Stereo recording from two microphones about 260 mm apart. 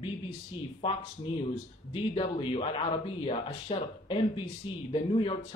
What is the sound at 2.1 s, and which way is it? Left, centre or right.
Speech, left.